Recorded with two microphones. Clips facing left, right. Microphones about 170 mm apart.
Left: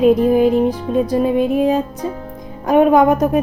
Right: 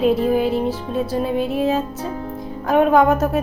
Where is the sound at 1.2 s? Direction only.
45° left (ahead or behind).